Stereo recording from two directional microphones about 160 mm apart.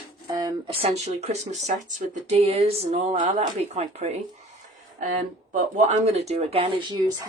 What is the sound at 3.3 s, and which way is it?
Speech, 45° right (ahead or behind).